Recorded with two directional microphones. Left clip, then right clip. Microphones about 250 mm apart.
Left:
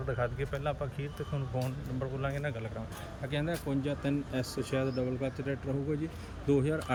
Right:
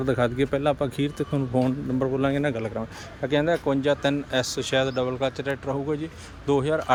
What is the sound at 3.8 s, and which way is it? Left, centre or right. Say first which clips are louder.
Speech: right 11 dB; centre.